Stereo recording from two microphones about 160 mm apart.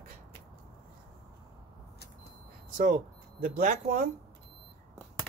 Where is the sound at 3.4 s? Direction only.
55° right (ahead or behind).